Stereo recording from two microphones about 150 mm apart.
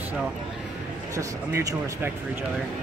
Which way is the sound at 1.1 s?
20° right (ahead or behind).